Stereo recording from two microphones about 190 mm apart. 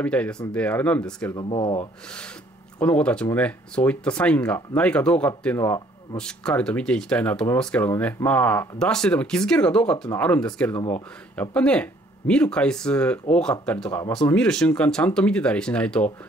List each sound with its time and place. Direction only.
0.0 s speech: 5° left (ahead or behind)
1.3 s speech: 25° left (ahead or behind)
2.0 s speech: 5° left (ahead or behind)